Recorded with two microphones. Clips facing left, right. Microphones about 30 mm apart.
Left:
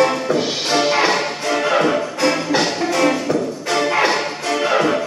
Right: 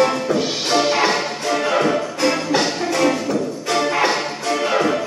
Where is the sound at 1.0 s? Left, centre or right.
Centre.